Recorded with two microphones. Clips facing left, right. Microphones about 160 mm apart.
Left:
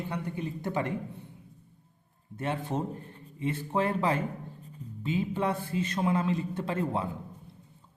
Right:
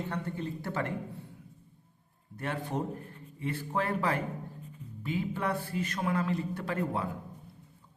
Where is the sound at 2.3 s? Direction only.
20° left (ahead or behind).